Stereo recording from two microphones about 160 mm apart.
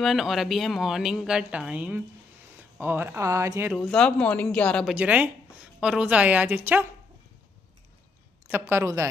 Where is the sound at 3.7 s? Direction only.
5° left (ahead or behind).